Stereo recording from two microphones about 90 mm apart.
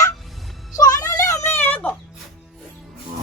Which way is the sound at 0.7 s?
40° left (ahead or behind).